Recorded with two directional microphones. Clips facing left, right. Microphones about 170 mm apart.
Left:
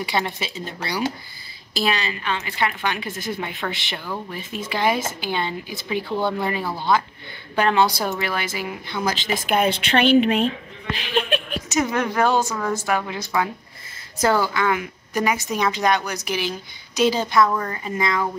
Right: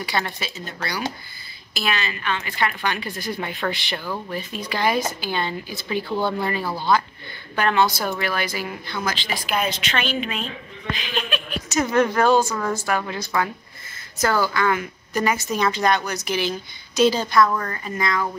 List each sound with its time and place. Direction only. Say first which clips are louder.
0.0 s a woman's voice: left 2 dB; 25° left (ahead or behind)
6.0 s speech: even; 5° right (ahead or behind)
7.5 s a woman's voice: left 1 dB; 30° left (ahead or behind)
9.0 s speech: left 4 dB; 45° left (ahead or behind)
9.5 s a woman's voice: left 5 dB; 55° left (ahead or behind)
11.7 s a woman's voice: right 2 dB; 15° left (ahead or behind)
14.1 s a woman's voice: left 1 dB; 25° left (ahead or behind)